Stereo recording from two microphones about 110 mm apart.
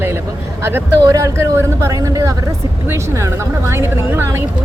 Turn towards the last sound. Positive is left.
turn(degrees=-20)  # may be behind; listen again after turning